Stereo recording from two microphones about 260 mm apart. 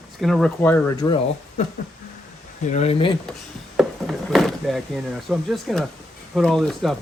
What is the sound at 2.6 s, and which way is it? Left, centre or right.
Speech, left.